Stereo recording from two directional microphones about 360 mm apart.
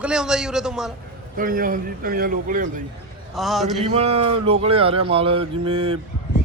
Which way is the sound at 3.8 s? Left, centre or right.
Centre.